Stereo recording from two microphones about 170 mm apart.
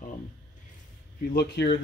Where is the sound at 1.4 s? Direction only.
80° left.